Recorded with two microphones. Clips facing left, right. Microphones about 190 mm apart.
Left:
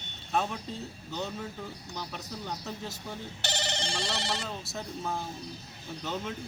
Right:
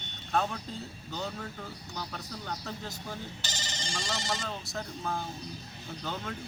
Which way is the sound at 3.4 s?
65° left (ahead or behind).